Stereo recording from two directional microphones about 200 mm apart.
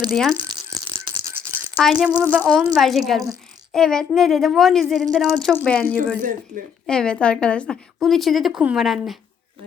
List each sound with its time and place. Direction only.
0.1 s a woman's voice: centre (ahead or behind)
0.7 s rattle: 15° right (ahead or behind)
1.8 s a woman's voice: centre (ahead or behind)